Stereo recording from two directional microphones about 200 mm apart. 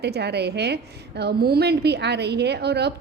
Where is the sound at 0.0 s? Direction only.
55° right (ahead or behind).